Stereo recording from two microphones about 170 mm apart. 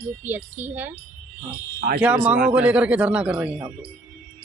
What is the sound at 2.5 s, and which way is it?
Speech, 5° right (ahead or behind).